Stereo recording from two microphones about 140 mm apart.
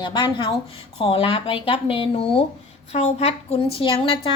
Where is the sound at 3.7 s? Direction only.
40° left (ahead or behind).